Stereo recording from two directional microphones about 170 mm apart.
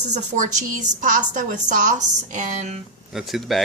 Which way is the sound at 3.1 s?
Centre (ahead or behind).